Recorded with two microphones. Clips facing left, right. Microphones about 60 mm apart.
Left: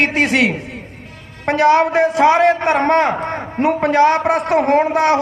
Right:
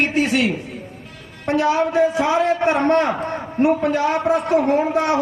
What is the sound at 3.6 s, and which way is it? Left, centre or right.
A man's voice, left.